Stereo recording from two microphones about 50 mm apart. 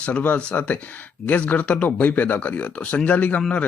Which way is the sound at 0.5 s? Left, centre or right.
Left.